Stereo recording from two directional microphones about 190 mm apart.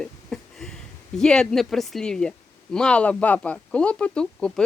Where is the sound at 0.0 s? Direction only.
5° left (ahead or behind).